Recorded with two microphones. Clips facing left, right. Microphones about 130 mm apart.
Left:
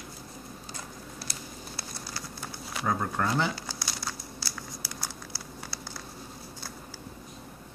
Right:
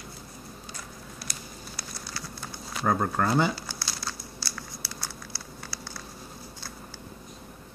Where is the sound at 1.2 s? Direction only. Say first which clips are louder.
Left 1 dB; 25° left (ahead or behind).